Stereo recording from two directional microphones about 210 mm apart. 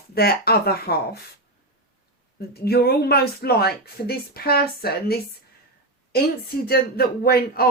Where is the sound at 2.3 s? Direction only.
50° left (ahead or behind).